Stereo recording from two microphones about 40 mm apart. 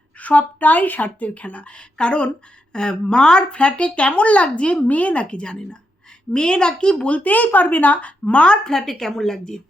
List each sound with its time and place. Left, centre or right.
0.2 s speech: left
7.2 s speech: left
8.2 s speech: left
8.6 s a woman's voice: centre